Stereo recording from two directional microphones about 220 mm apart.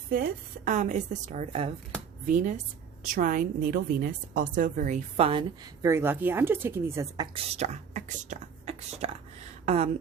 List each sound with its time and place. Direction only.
0.1 s a woman's voice: 35° right (ahead or behind); by 7.3 s 15° right (ahead or behind)
7.3 s speech: 30° right (ahead or behind)